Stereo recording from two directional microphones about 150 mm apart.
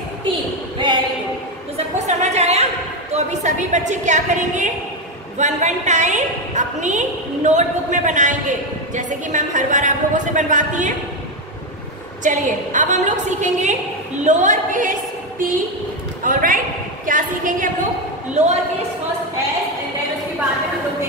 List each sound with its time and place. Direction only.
0.7 s a sound: 30° right (ahead or behind)
2.0 s a sound: 50° right (ahead or behind)
3.1 s a woman's voice: 50° right (ahead or behind)
12.2 s a woman's voice: 55° right (ahead or behind)
16.3 s a man's voice: 65° right (ahead or behind)
18.4 s a woman's voice: 50° right (ahead or behind)